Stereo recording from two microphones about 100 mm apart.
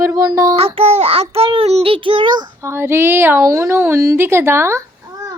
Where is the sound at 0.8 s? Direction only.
80° right; by 2.5 s 50° right (ahead or behind).